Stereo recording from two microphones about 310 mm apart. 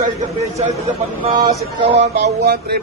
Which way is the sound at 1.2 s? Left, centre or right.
Right.